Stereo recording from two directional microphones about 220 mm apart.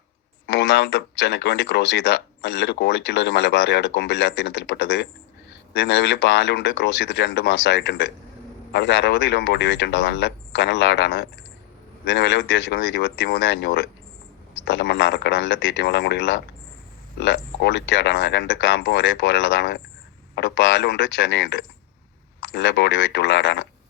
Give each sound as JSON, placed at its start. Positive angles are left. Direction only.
{"t": 0.4, "sound": "speech", "side_deg": 50}